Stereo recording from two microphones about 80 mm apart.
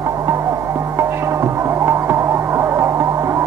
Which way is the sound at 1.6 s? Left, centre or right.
Right.